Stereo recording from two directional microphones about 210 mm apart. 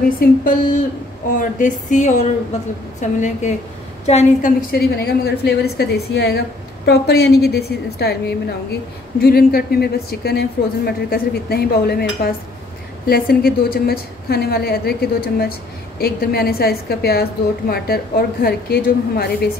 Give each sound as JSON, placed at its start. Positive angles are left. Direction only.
{"t": 0.2, "sound": "a woman's voice", "side_deg": 40}
{"t": 9.2, "sound": "a woman's voice", "side_deg": 45}